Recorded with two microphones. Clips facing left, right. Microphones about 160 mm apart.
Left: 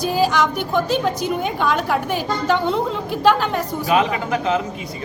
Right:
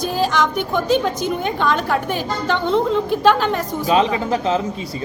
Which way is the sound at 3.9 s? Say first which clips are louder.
Right 1 dB; 30° right (ahead or behind).